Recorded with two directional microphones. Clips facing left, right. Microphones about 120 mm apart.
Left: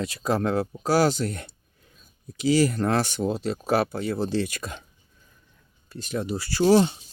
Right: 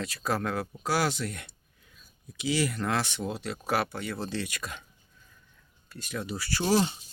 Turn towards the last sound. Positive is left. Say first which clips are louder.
# left 7 dB
turn(degrees=20)  # may be behind; listen again after turning